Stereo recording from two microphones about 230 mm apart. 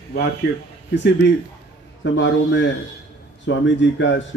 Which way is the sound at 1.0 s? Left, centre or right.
Left.